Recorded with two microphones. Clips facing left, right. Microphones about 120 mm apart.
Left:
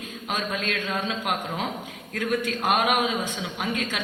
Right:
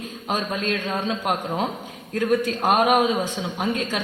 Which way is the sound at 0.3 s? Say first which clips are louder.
Right 4 dB; 35° right (ahead or behind).